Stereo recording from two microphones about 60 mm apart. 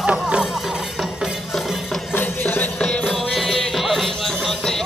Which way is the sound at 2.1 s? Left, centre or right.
Left.